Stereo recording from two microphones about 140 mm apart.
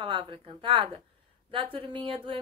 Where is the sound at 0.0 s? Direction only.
40° right (ahead or behind).